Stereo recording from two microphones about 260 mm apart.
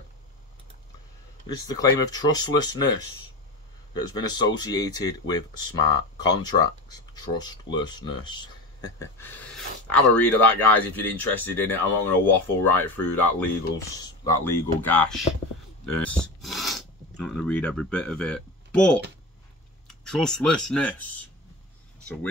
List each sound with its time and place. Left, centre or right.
1.6 s speech: centre
3.9 s speech: centre